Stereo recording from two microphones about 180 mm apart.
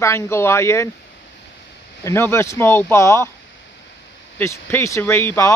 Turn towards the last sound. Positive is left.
turn(degrees=15)  # may be behind; listen again after turning